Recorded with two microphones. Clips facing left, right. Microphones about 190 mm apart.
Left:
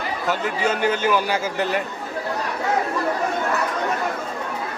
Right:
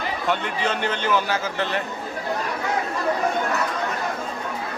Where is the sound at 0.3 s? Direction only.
5° left (ahead or behind).